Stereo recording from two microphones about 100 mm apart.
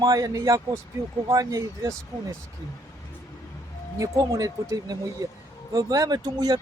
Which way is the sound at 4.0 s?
35° right (ahead or behind).